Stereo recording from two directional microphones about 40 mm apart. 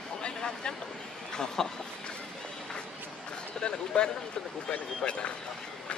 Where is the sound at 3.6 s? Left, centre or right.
Left.